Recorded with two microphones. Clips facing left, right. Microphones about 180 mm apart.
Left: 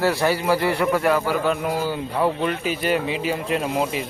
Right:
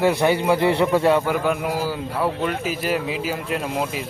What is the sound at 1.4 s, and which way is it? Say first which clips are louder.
Speech: even; 5° right (ahead or behind).